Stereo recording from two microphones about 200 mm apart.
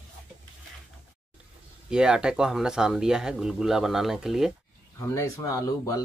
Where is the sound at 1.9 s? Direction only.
5° right (ahead or behind).